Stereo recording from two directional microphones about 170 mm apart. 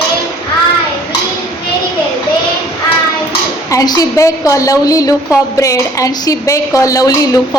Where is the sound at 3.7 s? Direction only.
20° left (ahead or behind).